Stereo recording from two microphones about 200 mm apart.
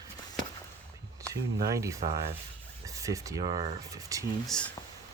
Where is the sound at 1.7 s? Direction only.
15° right (ahead or behind).